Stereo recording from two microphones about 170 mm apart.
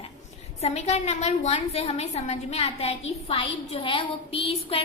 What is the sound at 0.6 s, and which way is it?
A woman's voice, 40° left (ahead or behind).